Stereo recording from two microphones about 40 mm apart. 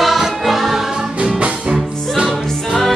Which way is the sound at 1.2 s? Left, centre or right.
Right.